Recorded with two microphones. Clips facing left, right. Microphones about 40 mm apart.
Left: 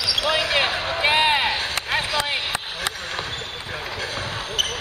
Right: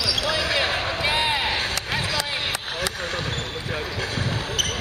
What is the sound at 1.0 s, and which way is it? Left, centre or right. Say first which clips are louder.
Basketball bounce: left 6 dB; left.